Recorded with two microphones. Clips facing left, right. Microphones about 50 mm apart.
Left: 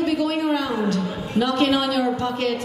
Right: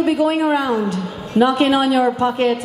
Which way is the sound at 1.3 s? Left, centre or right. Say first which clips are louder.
Right 5 dB; right.